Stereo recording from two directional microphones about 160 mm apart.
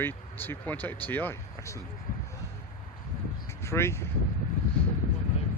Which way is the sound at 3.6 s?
15° left (ahead or behind).